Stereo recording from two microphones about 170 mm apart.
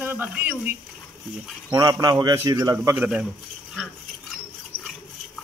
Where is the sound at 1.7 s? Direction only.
20° right (ahead or behind).